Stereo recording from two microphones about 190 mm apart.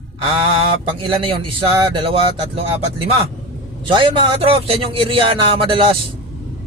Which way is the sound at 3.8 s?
25° right (ahead or behind).